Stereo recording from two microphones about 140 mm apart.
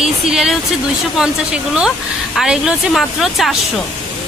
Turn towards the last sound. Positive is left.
turn(degrees=0)  # may be behind; listen again after turning